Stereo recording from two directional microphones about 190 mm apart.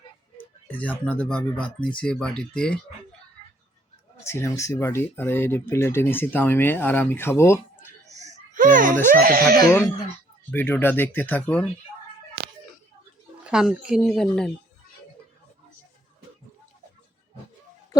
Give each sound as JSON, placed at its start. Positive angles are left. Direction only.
{"t": 0.7, "sound": "speech", "side_deg": 5}
{"t": 4.2, "sound": "speech", "side_deg": 15}
{"t": 8.1, "sound": "a sound", "side_deg": -40}
{"t": 9.2, "sound": "speech", "side_deg": -50}
{"t": 9.6, "sound": "speech", "side_deg": 15}
{"t": 13.4, "sound": "speech", "side_deg": -5}